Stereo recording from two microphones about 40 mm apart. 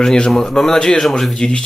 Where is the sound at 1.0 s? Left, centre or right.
Centre.